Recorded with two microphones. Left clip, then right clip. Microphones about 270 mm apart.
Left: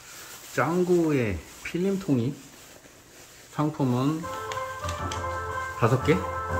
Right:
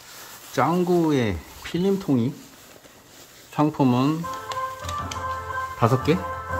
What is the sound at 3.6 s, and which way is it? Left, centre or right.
Speech, right.